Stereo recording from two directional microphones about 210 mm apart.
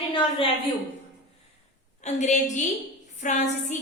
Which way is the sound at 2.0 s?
35° left (ahead or behind).